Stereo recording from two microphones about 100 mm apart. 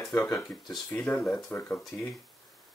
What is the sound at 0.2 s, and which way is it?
Speech, 25° left (ahead or behind).